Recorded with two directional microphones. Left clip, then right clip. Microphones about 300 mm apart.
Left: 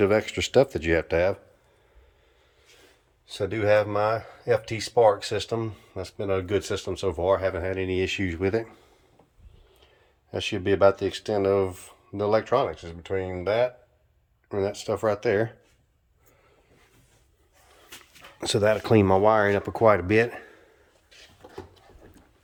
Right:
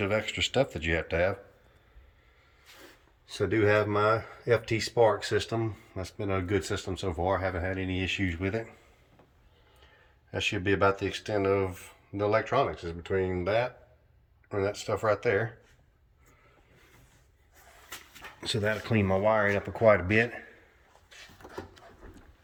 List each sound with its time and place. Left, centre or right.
0.0 s speech: left
3.2 s speech: centre
10.3 s speech: centre
18.3 s speech: centre